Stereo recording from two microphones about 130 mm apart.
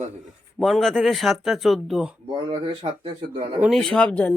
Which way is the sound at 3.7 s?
Centre (ahead or behind).